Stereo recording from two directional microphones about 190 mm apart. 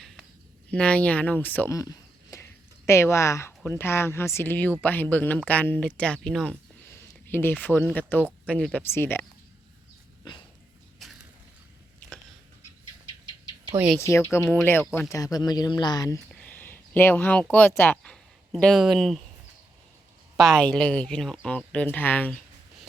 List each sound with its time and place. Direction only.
0.7 s speech: 5° left (ahead or behind)
6.9 s a sound: 10° left (ahead or behind)
7.9 s speech: 10° left (ahead or behind)
13.7 s speech: 5° right (ahead or behind)
14.0 s speech: 15° left (ahead or behind)
16.3 s speech: 10° left (ahead or behind)
20.3 s speech: centre (ahead or behind)